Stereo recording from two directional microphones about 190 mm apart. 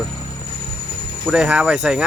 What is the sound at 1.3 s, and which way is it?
Speech, 5° right (ahead or behind).